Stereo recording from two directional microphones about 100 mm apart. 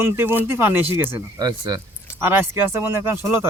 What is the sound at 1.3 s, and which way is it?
Speech, 40° right (ahead or behind).